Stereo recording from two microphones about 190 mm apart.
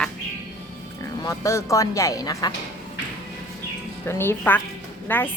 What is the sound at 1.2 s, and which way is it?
Speech, 15° left (ahead or behind).